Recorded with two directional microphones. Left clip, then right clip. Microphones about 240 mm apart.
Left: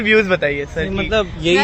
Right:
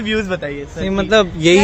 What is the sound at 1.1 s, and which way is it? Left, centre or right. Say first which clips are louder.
Speech: right 6 dB; right.